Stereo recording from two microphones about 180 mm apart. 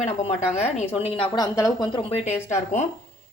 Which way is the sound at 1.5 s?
20° left (ahead or behind).